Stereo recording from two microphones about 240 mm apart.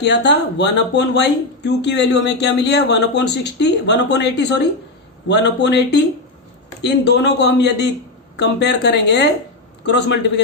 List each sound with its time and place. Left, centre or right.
0.0 s speech: left